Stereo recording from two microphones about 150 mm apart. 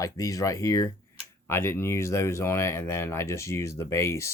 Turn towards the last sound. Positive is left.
turn(degrees=20)  # may be behind; listen again after turning